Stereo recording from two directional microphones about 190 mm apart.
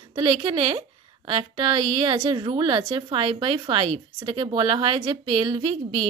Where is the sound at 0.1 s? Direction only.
25° right (ahead or behind).